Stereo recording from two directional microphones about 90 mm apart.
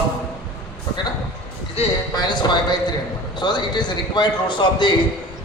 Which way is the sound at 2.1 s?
55° left (ahead or behind).